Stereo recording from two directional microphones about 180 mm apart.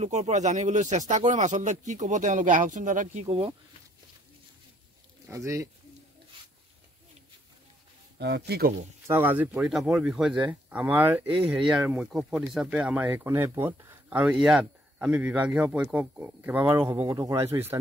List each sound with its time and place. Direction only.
0.0 s speech: 40° right (ahead or behind)
5.3 s speech: 15° right (ahead or behind)
8.2 s speech: 70° right (ahead or behind)
9.0 s speech: 10° right (ahead or behind)